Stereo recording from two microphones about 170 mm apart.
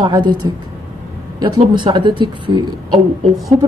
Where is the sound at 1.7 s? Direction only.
25° right (ahead or behind).